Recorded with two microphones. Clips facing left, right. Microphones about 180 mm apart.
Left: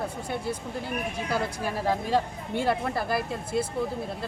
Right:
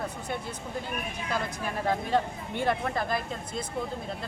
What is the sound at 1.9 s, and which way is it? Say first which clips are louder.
Speech: left 1 dB; 10° left (ahead or behind).